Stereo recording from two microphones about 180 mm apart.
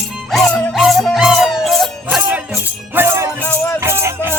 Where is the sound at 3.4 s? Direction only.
10° left (ahead or behind).